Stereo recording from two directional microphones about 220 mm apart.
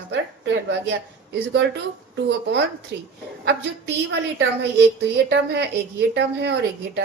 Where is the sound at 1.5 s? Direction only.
50° right (ahead or behind).